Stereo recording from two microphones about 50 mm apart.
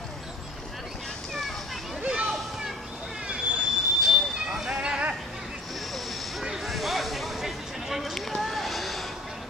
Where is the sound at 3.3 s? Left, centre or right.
Centre.